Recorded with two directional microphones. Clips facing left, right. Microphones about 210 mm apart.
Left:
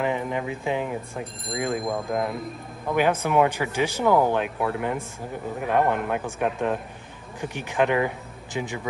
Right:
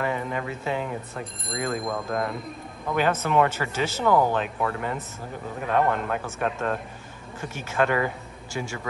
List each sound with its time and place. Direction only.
0.0 s speech: 15° left (ahead or behind)